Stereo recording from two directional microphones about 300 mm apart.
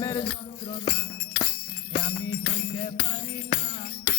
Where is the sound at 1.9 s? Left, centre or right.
Centre.